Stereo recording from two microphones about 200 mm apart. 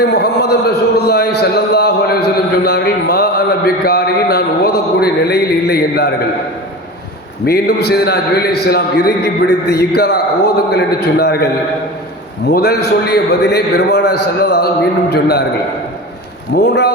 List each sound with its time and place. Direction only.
0.0 s a sound: 55° left (ahead or behind)
7.4 s a man's voice: 55° left (ahead or behind)
12.5 s a man's voice: 55° left (ahead or behind)
16.6 s a man's voice: 55° left (ahead or behind)